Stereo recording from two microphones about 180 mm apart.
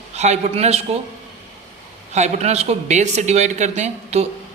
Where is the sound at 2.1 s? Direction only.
40° right (ahead or behind).